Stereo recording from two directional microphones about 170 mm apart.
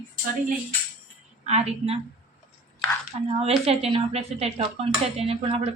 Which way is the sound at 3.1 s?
35° right (ahead or behind).